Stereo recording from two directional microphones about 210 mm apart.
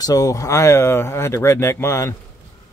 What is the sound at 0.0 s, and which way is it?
Speech, 15° left (ahead or behind).